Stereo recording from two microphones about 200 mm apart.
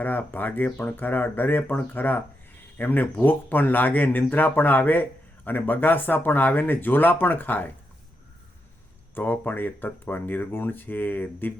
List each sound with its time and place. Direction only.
0.0 s speech: 10° left (ahead or behind)
9.1 s speech: 10° left (ahead or behind)